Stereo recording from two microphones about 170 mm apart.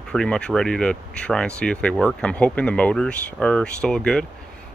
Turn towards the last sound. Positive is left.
turn(degrees=5)  # may be behind; listen again after turning